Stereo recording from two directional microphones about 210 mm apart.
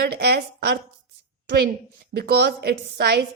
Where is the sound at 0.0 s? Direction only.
50° right (ahead or behind).